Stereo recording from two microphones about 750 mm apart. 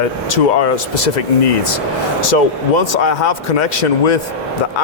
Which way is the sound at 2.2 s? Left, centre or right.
Left.